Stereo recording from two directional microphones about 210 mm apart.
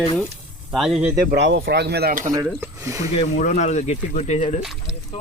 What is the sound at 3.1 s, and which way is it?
A man's voice, 35° left (ahead or behind).